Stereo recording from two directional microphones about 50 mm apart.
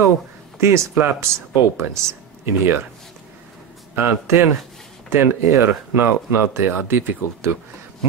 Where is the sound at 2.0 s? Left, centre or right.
Right.